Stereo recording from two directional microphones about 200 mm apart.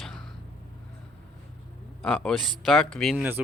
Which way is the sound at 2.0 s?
5° left (ahead or behind).